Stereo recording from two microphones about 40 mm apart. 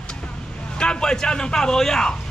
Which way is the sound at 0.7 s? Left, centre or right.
Left.